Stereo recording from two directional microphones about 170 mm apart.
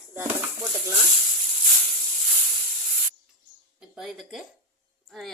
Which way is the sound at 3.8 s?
Centre (ahead or behind).